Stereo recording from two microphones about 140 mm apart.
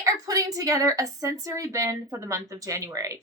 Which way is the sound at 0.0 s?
25° right (ahead or behind).